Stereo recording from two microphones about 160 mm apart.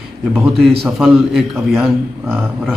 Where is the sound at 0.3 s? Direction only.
Centre (ahead or behind).